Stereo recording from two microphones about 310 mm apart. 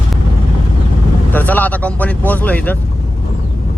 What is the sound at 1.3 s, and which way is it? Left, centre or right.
Speech, centre.